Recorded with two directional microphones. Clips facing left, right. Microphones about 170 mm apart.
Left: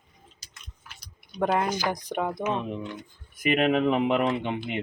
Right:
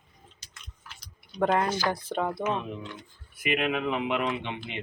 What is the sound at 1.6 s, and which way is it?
Speech, 15° left (ahead or behind).